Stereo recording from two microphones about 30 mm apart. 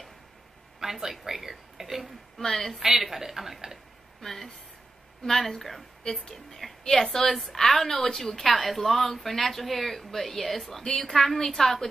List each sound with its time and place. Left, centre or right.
0.7 s a sound: centre
1.2 s speech: centre
2.5 s a woman's voice: centre
2.8 s speech: centre
4.2 s a woman's voice: centre
5.5 s a woman's voice: centre
10.8 s a woman's voice: centre